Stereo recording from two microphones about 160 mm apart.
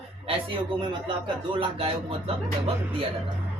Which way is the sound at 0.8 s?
30° right (ahead or behind).